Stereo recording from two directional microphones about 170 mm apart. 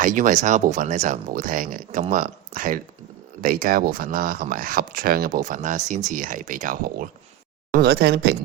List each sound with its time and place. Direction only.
0.0 s speech: 50° right (ahead or behind)
7.7 s speech: 65° right (ahead or behind)